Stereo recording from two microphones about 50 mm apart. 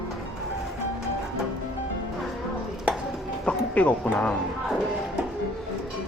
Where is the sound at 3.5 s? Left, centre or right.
Left.